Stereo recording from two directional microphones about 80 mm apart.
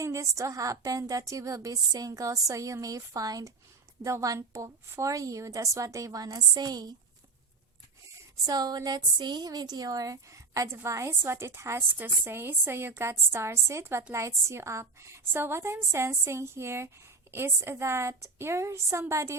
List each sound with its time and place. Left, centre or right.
0.0 s a woman's voice: right
8.4 s a woman's voice: right